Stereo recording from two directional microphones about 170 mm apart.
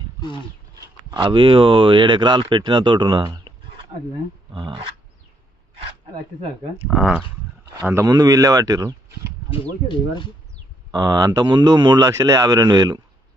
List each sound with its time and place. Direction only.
1.1 s speech: 30° right (ahead or behind)
6.9 s speech: 5° right (ahead or behind)
7.8 s speech: 15° right (ahead or behind)
10.9 s speech: 25° right (ahead or behind)